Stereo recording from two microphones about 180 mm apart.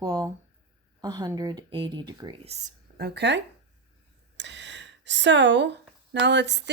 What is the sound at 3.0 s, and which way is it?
Speech, 70° right (ahead or behind).